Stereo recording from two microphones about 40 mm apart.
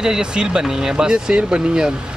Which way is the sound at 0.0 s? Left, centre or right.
Centre.